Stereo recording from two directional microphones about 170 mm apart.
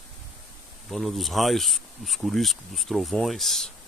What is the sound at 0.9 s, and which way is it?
Speech, centre (ahead or behind).